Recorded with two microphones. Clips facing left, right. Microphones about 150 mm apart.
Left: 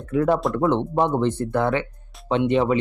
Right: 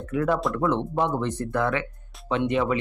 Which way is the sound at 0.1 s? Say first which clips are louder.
Left 4 dB; 30° left (ahead or behind).